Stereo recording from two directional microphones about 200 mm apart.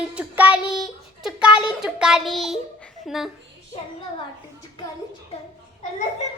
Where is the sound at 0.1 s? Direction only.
5° right (ahead or behind).